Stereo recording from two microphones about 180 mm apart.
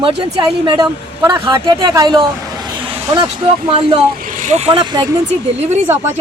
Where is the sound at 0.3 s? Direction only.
25° right (ahead or behind).